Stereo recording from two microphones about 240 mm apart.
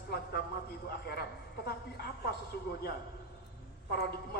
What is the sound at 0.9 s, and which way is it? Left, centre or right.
A man's voice, left.